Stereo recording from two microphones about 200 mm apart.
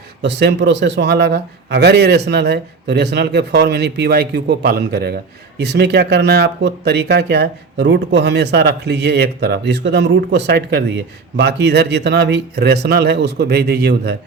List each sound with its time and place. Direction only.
0.2 s speech: 60° right (ahead or behind)